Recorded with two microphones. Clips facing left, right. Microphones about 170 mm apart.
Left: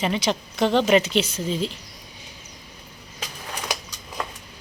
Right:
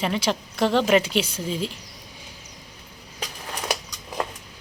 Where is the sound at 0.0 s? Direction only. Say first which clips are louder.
Left 1 dB; centre (ahead or behind).